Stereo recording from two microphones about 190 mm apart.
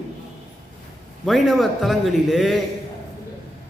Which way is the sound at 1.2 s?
Centre (ahead or behind).